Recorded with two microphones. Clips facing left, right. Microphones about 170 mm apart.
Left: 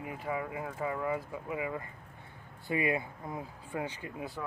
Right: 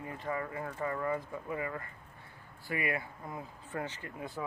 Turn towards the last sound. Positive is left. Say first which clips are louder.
# left 2 dB
turn(degrees=10)  # may be behind; listen again after turning